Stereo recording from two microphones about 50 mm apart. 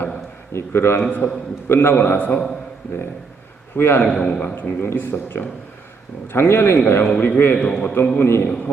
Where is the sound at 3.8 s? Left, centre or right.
Left.